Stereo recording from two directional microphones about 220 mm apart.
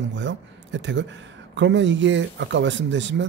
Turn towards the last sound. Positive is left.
turn(degrees=-55)  # may be behind; listen again after turning